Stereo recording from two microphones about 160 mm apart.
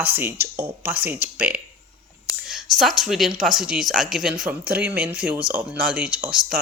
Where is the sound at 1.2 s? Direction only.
65° right (ahead or behind).